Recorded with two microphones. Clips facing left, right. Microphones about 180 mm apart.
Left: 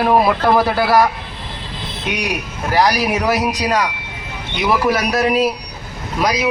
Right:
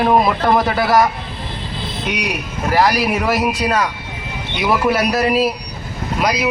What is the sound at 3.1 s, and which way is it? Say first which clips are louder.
Speech: even; centre (ahead or behind).